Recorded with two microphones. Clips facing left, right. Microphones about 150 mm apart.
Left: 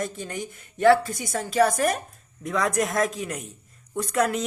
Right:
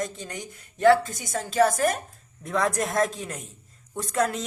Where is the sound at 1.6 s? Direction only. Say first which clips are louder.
Even; 25° right (ahead or behind).